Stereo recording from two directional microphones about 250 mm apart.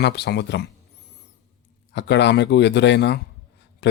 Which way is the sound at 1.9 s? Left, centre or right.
Left.